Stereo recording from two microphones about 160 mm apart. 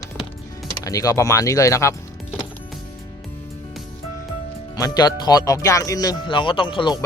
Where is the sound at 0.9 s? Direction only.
20° left (ahead or behind).